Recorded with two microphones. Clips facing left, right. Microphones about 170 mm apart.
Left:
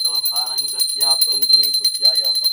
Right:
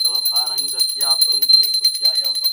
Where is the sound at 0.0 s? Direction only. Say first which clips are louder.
Even; 10° right (ahead or behind).